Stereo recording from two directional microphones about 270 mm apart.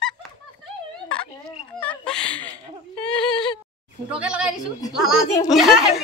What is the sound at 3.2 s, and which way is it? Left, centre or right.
Whimper, centre.